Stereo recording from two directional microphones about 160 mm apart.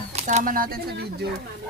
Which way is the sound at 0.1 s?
45° right (ahead or behind).